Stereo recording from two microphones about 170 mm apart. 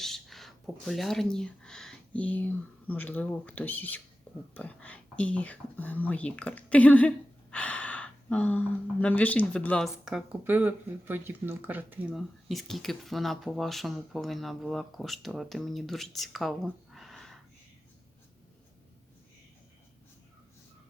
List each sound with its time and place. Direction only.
0.0 s speech: centre (ahead or behind)